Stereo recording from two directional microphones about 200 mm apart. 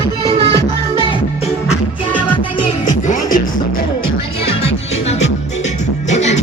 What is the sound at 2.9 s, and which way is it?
Music, 40° left (ahead or behind).